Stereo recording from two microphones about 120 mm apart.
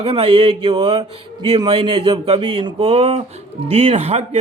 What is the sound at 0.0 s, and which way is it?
Speech, 50° right (ahead or behind).